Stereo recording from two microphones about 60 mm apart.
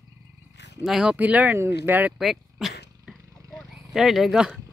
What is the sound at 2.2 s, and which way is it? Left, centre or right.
Dog, centre.